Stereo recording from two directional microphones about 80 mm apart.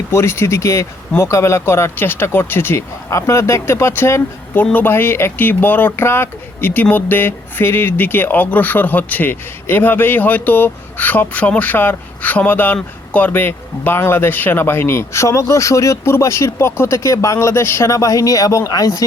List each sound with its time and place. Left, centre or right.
0.1 s speech: left
3.1 s speech: left